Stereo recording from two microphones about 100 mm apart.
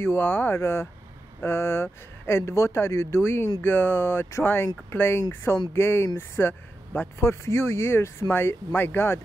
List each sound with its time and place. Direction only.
0.0 s speech: 25° left (ahead or behind)